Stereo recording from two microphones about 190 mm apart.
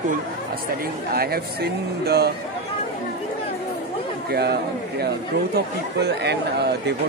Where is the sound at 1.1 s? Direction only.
55° right (ahead or behind).